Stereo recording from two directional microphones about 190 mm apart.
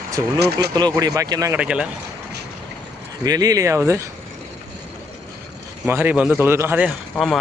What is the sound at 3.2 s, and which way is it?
Speech, 20° right (ahead or behind).